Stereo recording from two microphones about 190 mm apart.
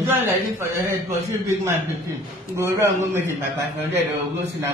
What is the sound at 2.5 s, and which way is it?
Speech, 15° right (ahead or behind).